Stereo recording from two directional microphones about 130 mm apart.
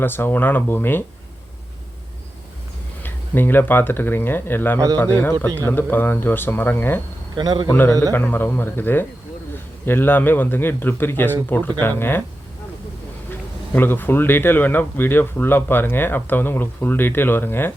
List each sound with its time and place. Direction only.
0.0 s speech: 15° left (ahead or behind)
3.0 s speech: 15° left (ahead or behind)
7.3 s speech: 35° right (ahead or behind)
7.7 s a man's voice: 15° left (ahead or behind)
13.7 s speech: 15° left (ahead or behind)